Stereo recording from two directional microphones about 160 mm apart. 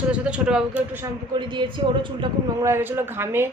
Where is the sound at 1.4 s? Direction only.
30° right (ahead or behind).